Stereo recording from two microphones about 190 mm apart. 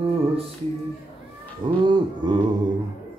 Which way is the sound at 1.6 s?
25° right (ahead or behind).